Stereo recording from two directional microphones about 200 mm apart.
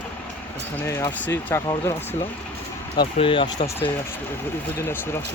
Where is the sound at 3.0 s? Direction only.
25° left (ahead or behind).